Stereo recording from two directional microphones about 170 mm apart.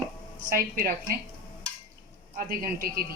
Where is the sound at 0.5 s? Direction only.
60° right (ahead or behind).